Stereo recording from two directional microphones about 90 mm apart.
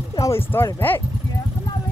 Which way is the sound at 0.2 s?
30° left (ahead or behind).